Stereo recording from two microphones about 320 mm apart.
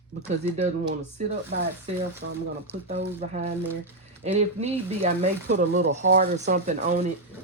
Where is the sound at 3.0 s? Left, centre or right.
Right.